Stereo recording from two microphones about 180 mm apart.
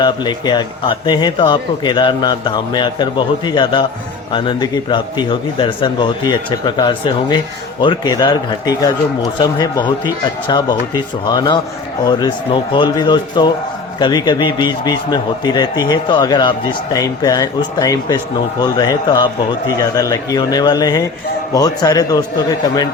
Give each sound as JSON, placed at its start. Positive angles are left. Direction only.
{"t": 0.0, "sound": "a man's voice", "side_deg": 25}